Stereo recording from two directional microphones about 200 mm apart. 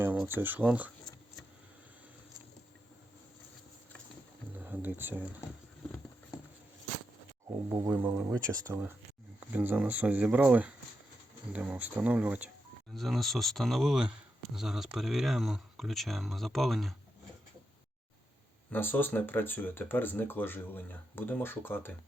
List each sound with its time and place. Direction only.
0.0 s speech: 10° right (ahead or behind)
4.5 s speech: 10° right (ahead or behind)
7.4 s speech: 15° right (ahead or behind); by 16.9 s centre (ahead or behind)
18.7 s speech: 10° left (ahead or behind)